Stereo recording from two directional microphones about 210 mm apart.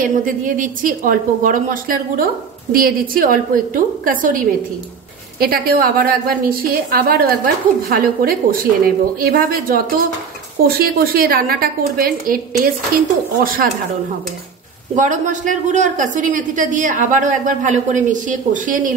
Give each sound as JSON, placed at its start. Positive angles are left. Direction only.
{"t": 0.0, "sound": "a woman's voice", "side_deg": -40}
{"t": 5.4, "sound": "a woman's voice", "side_deg": -45}
{"t": 10.8, "sound": "a woman's voice", "side_deg": -45}
{"t": 15.0, "sound": "a woman's voice", "side_deg": -35}